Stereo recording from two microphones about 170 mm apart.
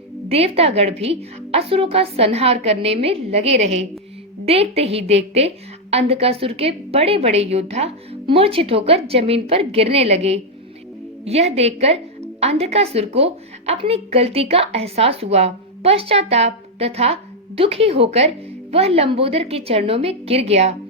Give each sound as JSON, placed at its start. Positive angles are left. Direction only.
{"t": 0.3, "sound": "a woman's voice", "side_deg": -35}